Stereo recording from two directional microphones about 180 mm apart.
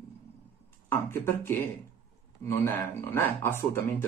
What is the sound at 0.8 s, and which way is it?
Speech, 10° left (ahead or behind).